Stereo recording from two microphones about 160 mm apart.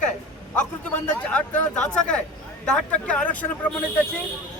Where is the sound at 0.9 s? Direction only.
10° left (ahead or behind).